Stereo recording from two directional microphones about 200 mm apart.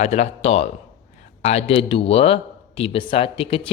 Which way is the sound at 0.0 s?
35° left (ahead or behind).